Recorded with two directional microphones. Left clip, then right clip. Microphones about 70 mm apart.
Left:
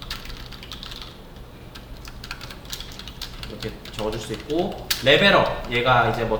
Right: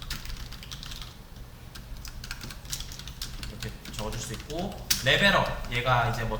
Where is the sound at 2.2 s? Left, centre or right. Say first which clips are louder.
Left 5 dB; right.